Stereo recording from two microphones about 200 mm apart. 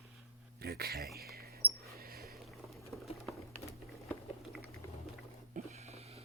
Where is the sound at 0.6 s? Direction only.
50° right (ahead or behind).